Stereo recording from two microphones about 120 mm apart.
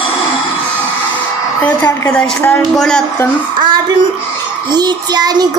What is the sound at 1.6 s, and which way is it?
A woman's voice, 15° left (ahead or behind).